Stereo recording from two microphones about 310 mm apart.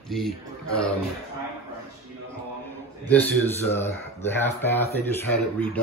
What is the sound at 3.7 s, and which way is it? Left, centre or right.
Speech, centre.